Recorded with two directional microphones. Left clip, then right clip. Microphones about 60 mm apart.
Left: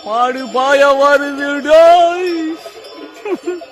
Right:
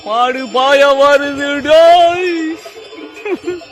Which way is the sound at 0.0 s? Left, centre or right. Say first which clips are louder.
Right 1 dB; left.